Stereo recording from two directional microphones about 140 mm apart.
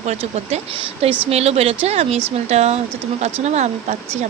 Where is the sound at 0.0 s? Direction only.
50° right (ahead or behind).